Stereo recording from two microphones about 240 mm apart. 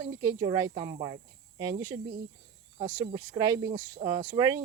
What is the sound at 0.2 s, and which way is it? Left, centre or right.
Speech, centre.